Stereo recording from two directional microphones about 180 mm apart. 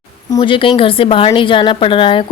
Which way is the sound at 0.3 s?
25° left (ahead or behind).